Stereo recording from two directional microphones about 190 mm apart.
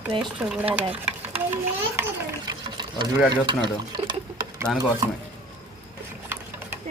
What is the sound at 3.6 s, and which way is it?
Speech, 20° right (ahead or behind).